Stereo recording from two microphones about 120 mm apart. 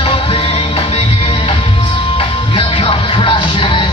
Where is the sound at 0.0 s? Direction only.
50° left (ahead or behind).